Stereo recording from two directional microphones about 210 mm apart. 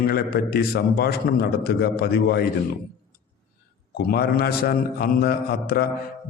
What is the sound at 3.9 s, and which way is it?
A man's voice, 45° left (ahead or behind).